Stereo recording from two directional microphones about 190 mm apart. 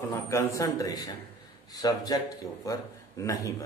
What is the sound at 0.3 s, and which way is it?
A man's voice, 15° left (ahead or behind).